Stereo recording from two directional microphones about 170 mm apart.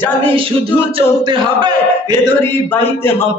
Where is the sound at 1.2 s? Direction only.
25° right (ahead or behind).